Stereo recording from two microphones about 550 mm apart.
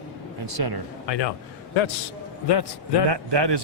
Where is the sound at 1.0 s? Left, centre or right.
Left.